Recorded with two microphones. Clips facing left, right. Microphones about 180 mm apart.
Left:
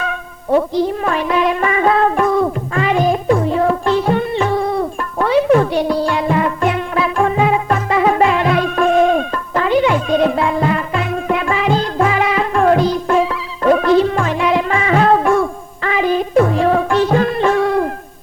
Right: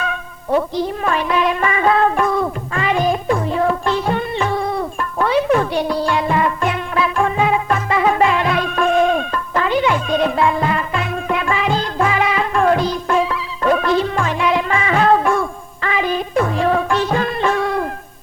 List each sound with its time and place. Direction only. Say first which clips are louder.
1.0 s music: left 2 dB; 45° left (ahead or behind)